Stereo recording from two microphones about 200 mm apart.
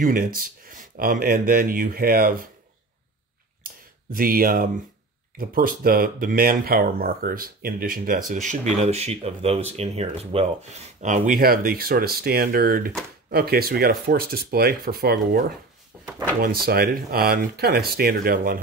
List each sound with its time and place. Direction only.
0.0 s speech: 45° right (ahead or behind)
4.1 s speech: 45° right (ahead or behind)